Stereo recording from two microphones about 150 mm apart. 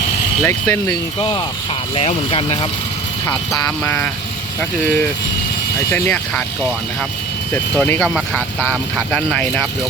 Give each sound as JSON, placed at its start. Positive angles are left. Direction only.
{"t": 0.4, "sound": "speech", "side_deg": 20}
{"t": 2.0, "sound": "speech", "side_deg": 40}
{"t": 3.8, "sound": "speech", "side_deg": 15}
{"t": 5.9, "sound": "speech", "side_deg": 10}
{"t": 7.5, "sound": "speech", "side_deg": 10}